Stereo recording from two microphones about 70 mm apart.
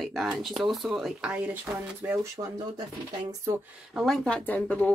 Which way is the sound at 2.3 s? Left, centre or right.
Right.